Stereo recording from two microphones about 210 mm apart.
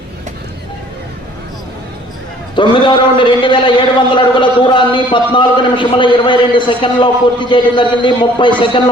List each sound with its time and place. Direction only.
2.6 s a man's voice: 25° left (ahead or behind)